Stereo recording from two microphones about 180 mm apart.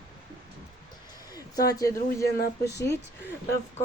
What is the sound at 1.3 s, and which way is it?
Speech, 20° left (ahead or behind).